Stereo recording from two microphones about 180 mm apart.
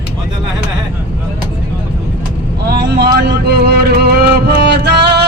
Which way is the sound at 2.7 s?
65° right (ahead or behind).